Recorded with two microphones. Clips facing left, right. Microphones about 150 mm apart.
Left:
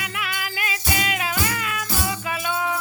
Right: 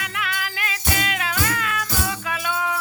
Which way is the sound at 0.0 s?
5° left (ahead or behind).